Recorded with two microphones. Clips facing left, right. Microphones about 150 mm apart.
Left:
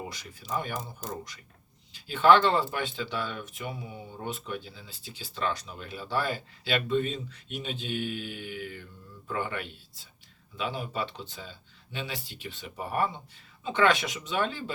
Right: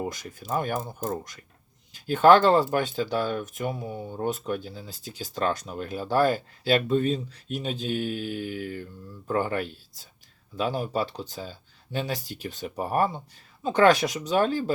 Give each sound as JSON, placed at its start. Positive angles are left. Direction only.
{"t": 0.1, "sound": "speech", "side_deg": -45}